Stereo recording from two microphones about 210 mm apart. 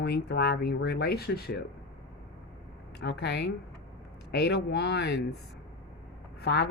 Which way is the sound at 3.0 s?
50° left (ahead or behind).